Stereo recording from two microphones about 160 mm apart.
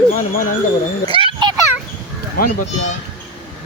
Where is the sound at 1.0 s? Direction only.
30° right (ahead or behind).